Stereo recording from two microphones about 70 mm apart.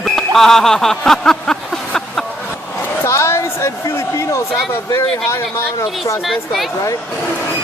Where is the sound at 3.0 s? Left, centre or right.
Left.